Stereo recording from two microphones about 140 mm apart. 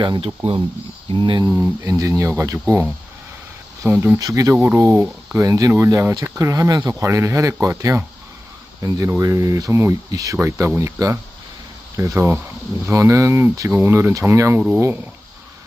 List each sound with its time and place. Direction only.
0.0 s speech: 35° right (ahead or behind)
1.5 s speech: 20° right (ahead or behind)